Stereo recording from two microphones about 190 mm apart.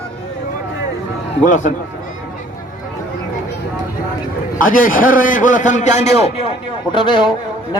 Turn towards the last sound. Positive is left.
turn(degrees=25)  # may be behind; listen again after turning